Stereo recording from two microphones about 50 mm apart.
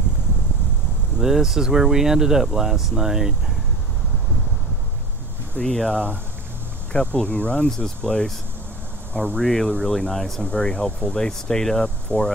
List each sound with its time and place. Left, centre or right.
1.2 s speech: centre
5.6 s speech: centre
7.2 s speech: left
7.6 s speech: centre
9.1 s speech: left
9.4 s speech: centre
10.4 s speech: centre
12.1 s speech: left